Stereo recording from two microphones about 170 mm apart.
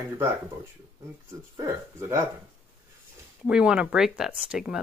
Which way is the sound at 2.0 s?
15° right (ahead or behind).